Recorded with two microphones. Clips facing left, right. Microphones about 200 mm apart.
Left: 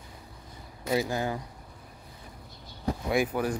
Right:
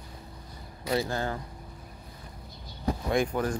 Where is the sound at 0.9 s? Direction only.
15° left (ahead or behind).